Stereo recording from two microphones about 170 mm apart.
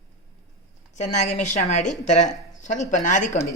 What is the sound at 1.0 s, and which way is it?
Speech, 45° left (ahead or behind).